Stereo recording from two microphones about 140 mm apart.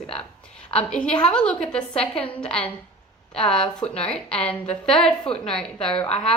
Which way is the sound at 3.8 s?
5° left (ahead or behind).